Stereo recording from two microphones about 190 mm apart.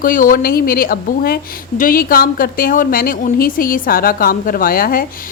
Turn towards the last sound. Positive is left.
turn(degrees=50)  # may be behind; listen again after turning